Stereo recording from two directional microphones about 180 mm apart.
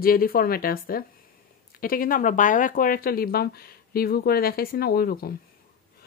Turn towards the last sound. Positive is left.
turn(degrees=55)  # may be behind; listen again after turning